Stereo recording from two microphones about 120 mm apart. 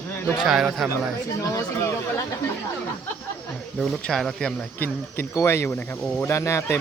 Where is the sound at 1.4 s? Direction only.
25° left (ahead or behind).